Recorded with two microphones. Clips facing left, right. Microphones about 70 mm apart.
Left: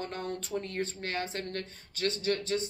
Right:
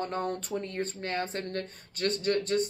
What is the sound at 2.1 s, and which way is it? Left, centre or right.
Speech, right.